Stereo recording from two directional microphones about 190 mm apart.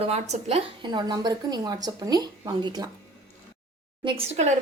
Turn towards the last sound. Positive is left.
turn(degrees=-35)  # may be behind; listen again after turning